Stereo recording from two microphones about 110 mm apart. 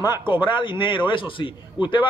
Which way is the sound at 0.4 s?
45° left (ahead or behind).